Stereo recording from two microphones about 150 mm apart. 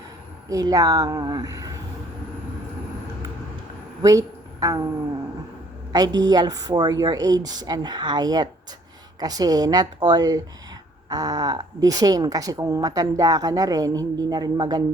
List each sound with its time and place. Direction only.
0.4 s a woman's voice: 25° right (ahead or behind)
4.0 s a sound: 20° right (ahead or behind)
5.9 s a woman's voice: 25° right (ahead or behind)